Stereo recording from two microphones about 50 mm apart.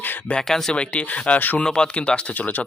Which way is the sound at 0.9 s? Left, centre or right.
Left.